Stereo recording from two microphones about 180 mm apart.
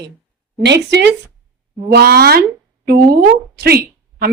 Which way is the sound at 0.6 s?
70° right (ahead or behind).